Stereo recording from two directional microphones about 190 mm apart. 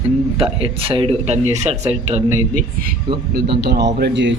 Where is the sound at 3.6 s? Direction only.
60° right (ahead or behind).